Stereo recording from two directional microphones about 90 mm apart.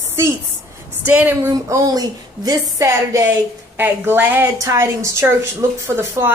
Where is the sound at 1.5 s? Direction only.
45° right (ahead or behind).